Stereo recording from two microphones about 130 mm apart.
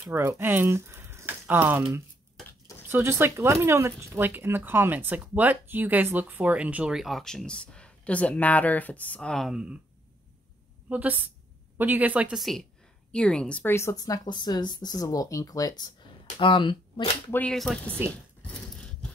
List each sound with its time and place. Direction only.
0.1 s speech: 15° right (ahead or behind)
2.9 s speech: 20° right (ahead or behind)
10.9 s speech: 15° right (ahead or behind); by 15.9 s 30° left (ahead or behind)
16.3 s speech: 40° left (ahead or behind)
17.3 s speech: 10° left (ahead or behind)